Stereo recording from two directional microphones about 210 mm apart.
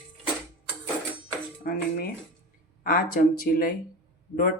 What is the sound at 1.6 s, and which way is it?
Music, 45° left (ahead or behind).